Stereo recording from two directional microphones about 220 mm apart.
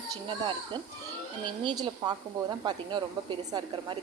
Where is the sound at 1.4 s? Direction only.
20° right (ahead or behind).